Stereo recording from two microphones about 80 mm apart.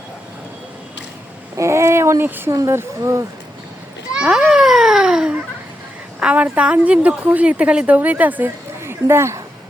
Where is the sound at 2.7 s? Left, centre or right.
Right.